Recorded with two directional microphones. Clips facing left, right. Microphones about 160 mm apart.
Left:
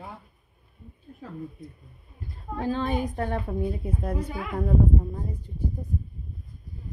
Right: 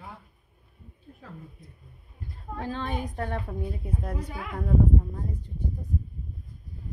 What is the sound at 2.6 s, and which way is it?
A woman's voice, 5° left (ahead or behind).